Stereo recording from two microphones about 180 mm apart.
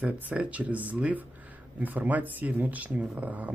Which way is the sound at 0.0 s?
5° right (ahead or behind).